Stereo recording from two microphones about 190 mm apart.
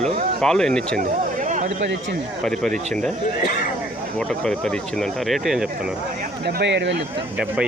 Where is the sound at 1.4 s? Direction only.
40° right (ahead or behind).